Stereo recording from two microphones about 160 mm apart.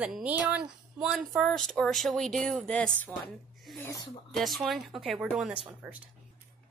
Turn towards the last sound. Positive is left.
turn(degrees=-10)  # may be behind; listen again after turning